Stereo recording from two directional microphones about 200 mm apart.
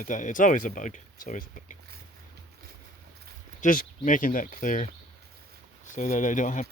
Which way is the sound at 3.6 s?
40° left (ahead or behind).